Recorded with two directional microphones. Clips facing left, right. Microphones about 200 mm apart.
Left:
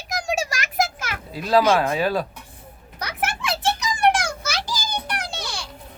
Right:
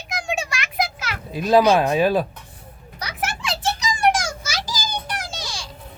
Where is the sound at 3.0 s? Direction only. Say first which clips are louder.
Left 1 dB; 55° left (ahead or behind).